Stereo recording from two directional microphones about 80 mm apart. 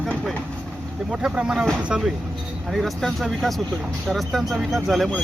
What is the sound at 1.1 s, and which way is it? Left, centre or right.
Speech, centre.